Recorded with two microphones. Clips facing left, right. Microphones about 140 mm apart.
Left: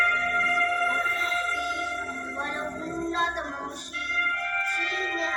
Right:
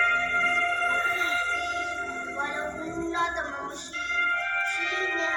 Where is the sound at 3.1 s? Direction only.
30° left (ahead or behind).